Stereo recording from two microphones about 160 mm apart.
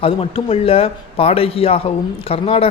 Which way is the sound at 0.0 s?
35° left (ahead or behind).